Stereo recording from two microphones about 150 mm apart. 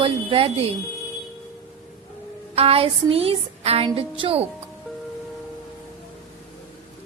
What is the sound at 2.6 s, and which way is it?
A woman's voice, 40° right (ahead or behind).